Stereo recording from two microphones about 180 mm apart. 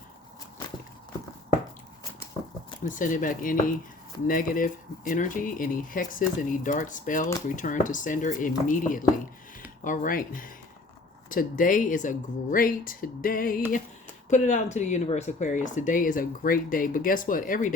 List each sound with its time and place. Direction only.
2.8 s speech: 45° left (ahead or behind)
14.3 s speech: 40° left (ahead or behind)